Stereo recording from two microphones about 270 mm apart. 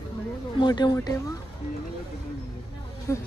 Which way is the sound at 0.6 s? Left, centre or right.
Centre.